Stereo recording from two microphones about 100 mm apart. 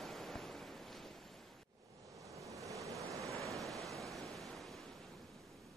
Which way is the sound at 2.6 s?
35° right (ahead or behind).